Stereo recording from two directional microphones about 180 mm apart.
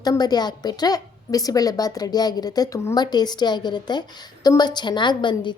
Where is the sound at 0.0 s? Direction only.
20° left (ahead or behind).